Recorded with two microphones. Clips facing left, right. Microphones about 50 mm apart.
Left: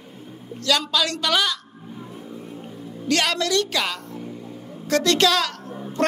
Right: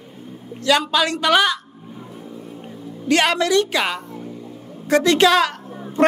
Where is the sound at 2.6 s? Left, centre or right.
Centre.